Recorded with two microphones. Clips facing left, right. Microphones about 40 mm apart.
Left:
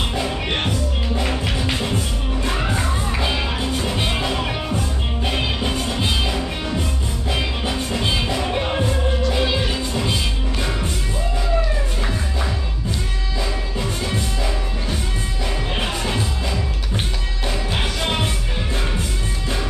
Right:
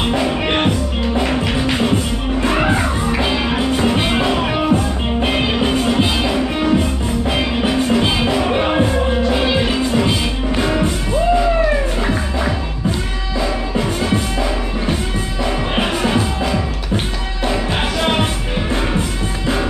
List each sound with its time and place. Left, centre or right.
0.0 s music: right
2.4 s music: right
8.5 s music: right
15.7 s music: right